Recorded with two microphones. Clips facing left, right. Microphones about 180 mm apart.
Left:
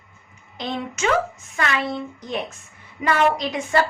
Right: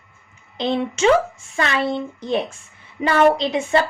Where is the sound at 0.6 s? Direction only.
25° right (ahead or behind).